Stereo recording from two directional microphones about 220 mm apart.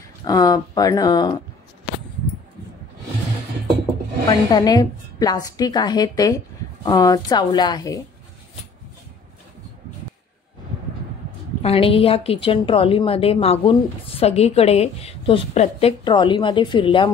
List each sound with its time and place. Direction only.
0.2 s a woman's voice: 15° left (ahead or behind)
4.3 s a woman's voice: 20° left (ahead or behind)
11.6 s a woman's voice: 25° left (ahead or behind)